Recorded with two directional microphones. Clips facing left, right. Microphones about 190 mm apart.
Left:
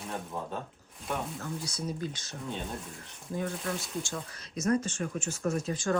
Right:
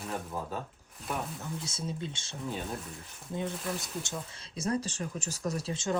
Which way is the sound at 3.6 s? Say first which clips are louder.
Left 1 dB; centre (ahead or behind).